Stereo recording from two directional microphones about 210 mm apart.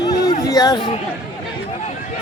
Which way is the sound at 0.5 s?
20° left (ahead or behind).